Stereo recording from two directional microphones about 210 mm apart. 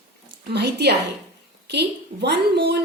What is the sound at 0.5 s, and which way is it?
A woman's voice, 50° right (ahead or behind).